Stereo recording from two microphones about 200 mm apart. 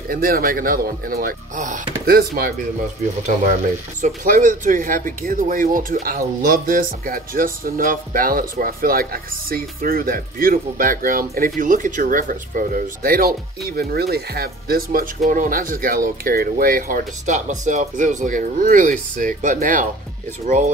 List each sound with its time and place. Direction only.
0.1 s speech: 45° right (ahead or behind)
4.0 s speech: 40° right (ahead or behind)